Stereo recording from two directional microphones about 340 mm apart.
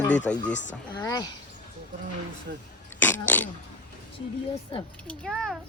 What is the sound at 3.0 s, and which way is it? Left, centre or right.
Throat clearing, centre.